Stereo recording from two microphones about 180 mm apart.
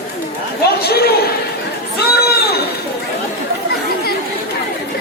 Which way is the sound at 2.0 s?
60° left (ahead or behind).